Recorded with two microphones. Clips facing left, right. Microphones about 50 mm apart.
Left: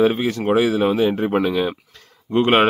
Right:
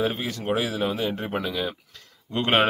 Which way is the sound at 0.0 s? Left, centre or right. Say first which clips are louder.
Left 9 dB; left.